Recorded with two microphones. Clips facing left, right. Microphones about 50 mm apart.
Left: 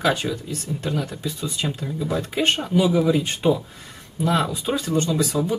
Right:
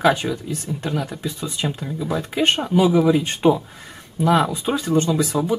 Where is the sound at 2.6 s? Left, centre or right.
Centre.